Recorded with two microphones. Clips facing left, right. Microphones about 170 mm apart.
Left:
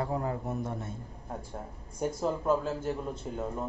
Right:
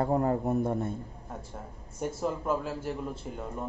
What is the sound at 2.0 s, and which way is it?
Speech, 5° right (ahead or behind).